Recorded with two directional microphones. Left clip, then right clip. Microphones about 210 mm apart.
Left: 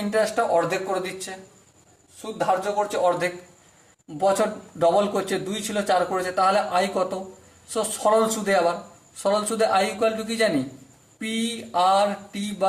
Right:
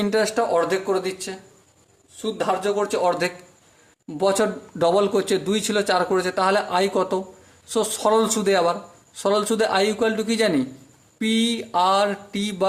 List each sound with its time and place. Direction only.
0.1 s a man's voice: 40° right (ahead or behind)